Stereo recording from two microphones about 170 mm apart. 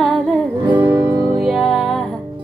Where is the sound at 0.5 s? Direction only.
30° right (ahead or behind).